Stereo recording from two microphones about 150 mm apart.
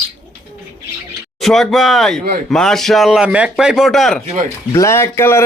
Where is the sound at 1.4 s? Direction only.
Centre (ahead or behind).